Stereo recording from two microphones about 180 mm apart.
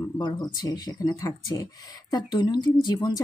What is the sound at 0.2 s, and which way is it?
Speech, 20° left (ahead or behind).